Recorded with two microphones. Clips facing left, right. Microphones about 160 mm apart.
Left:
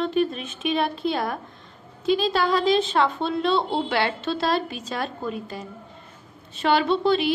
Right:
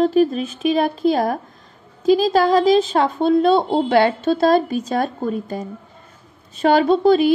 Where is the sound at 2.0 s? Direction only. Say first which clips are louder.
Right 7 dB; 40° right (ahead or behind).